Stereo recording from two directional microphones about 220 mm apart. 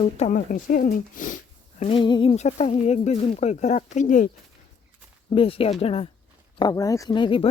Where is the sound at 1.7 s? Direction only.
25° left (ahead or behind).